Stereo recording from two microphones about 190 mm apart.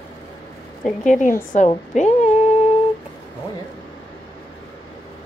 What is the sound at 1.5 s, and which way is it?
Speech, 40° left (ahead or behind).